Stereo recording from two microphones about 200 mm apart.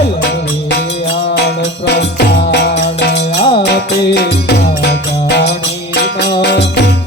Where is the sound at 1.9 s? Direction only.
55° left (ahead or behind).